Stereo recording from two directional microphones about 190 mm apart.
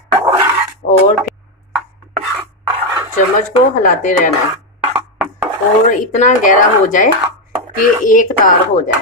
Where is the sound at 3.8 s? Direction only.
40° left (ahead or behind).